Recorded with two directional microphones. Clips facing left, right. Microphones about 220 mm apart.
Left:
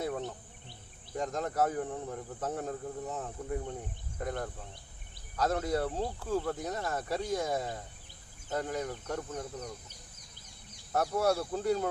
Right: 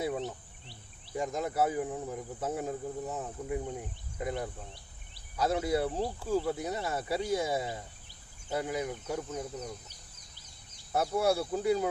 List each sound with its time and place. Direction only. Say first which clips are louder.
1.1 s speech: right 1 dB; 10° right (ahead or behind)
10.9 s speech: right 1 dB; 10° right (ahead or behind)